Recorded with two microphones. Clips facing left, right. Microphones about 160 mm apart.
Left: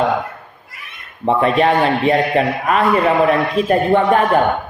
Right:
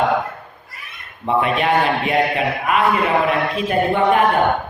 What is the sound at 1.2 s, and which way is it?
A man's voice, 35° left (ahead or behind).